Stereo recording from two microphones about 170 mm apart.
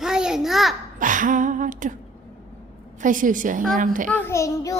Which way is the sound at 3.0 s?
50° right (ahead or behind).